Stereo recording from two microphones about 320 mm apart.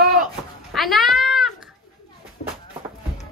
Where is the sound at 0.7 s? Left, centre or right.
Centre.